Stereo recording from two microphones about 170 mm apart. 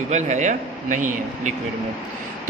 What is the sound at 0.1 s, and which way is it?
Speech, 45° right (ahead or behind).